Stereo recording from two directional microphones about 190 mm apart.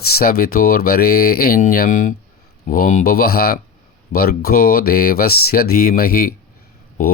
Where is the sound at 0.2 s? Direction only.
50° left (ahead or behind).